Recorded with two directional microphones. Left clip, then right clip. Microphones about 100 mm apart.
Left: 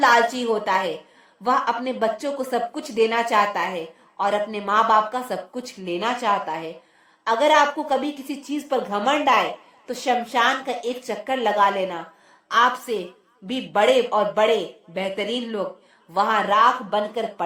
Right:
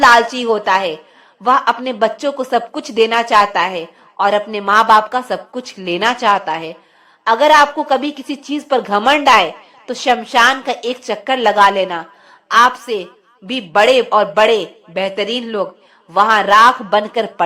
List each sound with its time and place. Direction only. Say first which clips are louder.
0.0 s speech: right 7 dB; 20° right (ahead or behind)
5.8 s a woman's voice: right 9 dB; 40° right (ahead or behind)
6.4 s a woman's voice: right 7 dB; 25° right (ahead or behind)
9.8 s a woman's voice: right 7 dB; 25° right (ahead or behind)